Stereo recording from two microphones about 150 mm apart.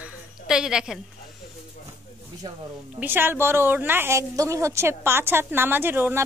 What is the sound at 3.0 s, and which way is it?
A woman's voice, 15° right (ahead or behind).